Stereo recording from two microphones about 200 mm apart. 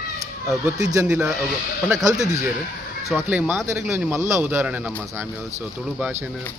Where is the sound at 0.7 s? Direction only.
15° right (ahead or behind).